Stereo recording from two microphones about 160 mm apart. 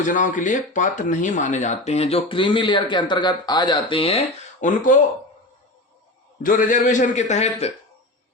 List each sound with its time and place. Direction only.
0.0 s speech: 50° left (ahead or behind)
6.4 s a man's voice: 55° left (ahead or behind)